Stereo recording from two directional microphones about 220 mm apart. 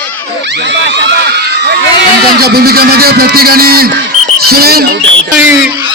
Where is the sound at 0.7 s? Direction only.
50° right (ahead or behind).